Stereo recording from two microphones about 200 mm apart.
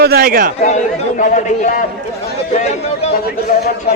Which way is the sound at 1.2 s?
40° left (ahead or behind).